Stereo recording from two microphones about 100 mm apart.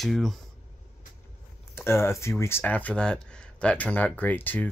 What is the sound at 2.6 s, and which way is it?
Speech, 15° left (ahead or behind).